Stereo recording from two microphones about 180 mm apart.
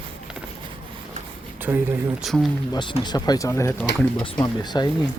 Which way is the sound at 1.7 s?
10° right (ahead or behind).